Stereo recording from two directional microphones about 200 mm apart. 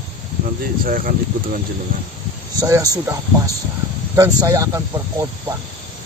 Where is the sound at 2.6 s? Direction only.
15° right (ahead or behind).